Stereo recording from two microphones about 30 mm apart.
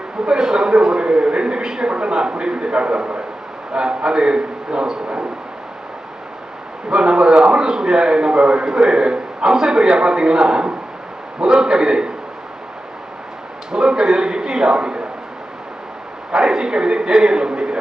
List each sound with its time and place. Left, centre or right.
0.3 s a man's voice: right
1.6 s a man's voice: right
6.9 s a man's voice: right
13.7 s speech: right
16.3 s a sound: right